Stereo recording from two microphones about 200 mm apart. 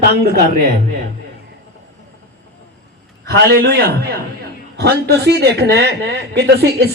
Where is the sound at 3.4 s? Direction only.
50° right (ahead or behind).